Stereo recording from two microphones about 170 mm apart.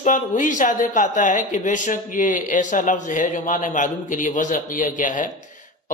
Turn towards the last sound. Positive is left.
turn(degrees=50)  # may be behind; listen again after turning